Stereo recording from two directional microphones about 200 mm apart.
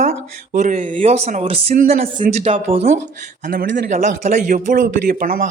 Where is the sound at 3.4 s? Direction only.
55° right (ahead or behind).